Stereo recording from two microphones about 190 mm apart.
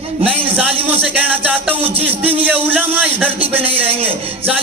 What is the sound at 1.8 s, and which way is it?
Speech, 30° right (ahead or behind).